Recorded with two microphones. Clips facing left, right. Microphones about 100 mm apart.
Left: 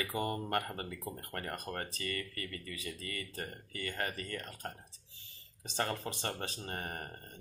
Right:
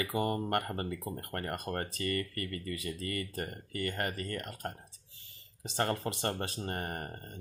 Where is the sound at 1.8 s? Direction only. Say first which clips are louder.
Right 5 dB; 40° right (ahead or behind).